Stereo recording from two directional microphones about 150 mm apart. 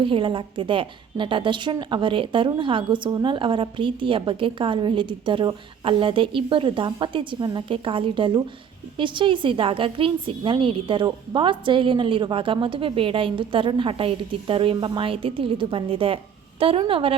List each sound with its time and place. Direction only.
0.0 s a woman's voice: 35° right (ahead or behind)